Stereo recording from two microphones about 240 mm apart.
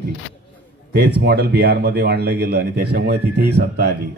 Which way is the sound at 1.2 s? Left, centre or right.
Right.